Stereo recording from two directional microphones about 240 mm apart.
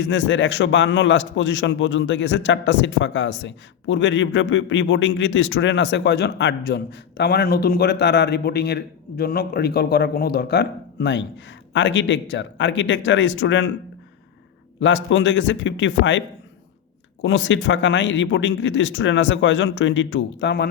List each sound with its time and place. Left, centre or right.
0.0 s a man's voice: left
14.8 s a man's voice: left
17.2 s a man's voice: left